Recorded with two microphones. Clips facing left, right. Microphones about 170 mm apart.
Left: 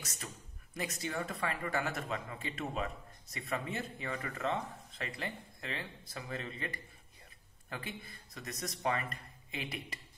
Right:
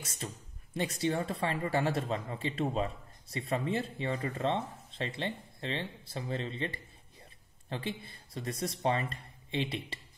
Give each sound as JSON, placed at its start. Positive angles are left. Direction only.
{"t": 0.0, "sound": "a man's voice", "side_deg": -30}